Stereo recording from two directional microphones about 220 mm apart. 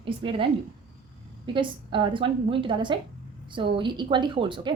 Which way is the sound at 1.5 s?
20° right (ahead or behind).